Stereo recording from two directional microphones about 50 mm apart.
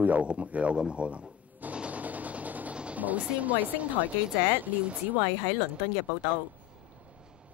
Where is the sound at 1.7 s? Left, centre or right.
Right.